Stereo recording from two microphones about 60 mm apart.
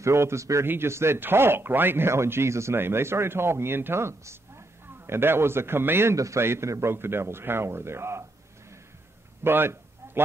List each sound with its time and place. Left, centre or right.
0.0 s speech: right
0.7 s speech: right
6.1 s a man's voice: right
6.4 s speech: right
9.4 s a sound: right